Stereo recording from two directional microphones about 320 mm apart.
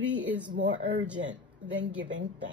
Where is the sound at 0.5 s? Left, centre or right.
Right.